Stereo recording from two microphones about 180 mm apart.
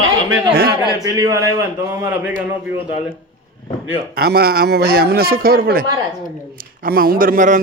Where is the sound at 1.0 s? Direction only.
20° right (ahead or behind).